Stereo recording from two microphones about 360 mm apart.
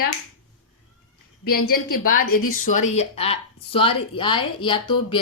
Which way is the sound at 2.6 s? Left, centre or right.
Centre.